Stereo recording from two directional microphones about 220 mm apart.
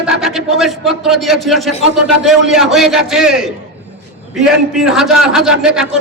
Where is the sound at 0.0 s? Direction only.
Centre (ahead or behind).